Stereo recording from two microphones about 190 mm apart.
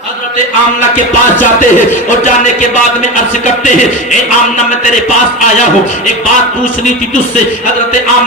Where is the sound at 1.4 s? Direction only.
40° left (ahead or behind).